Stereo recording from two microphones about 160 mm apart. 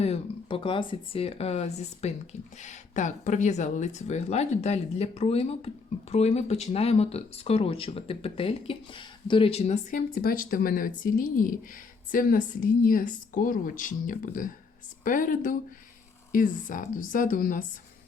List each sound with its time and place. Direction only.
0.0 s speech: 35° left (ahead or behind)
9.9 s a woman's voice: 65° left (ahead or behind)